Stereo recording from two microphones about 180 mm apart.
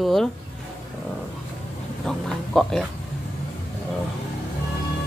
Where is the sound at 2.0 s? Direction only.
5° left (ahead or behind).